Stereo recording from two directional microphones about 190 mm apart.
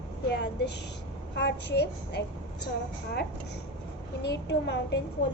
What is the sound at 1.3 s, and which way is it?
Speech, 65° left (ahead or behind).